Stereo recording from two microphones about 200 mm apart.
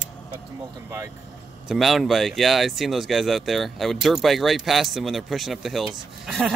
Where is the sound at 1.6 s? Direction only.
Centre (ahead or behind).